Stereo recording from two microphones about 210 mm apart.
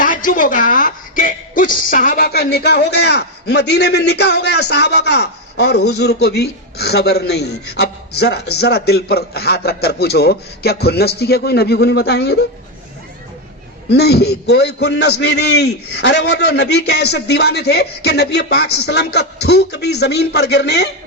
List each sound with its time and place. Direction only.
0.0 s a man's voice: 40° left (ahead or behind)
13.9 s a man's voice: 50° left (ahead or behind)